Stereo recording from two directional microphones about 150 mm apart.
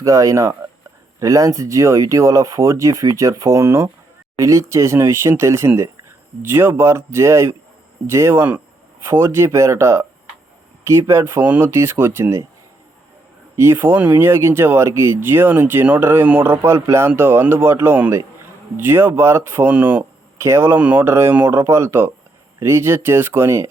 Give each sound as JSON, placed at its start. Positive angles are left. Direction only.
{"t": 0.0, "sound": "speech", "side_deg": -20}
{"t": 13.6, "sound": "speech", "side_deg": -15}